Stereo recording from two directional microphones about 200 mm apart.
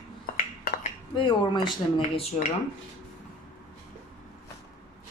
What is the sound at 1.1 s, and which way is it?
Speech, 25° left (ahead or behind).